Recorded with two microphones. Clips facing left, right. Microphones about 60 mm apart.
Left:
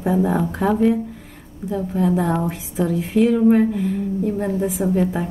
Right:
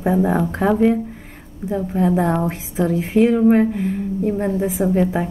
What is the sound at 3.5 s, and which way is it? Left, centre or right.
A woman's voice, right.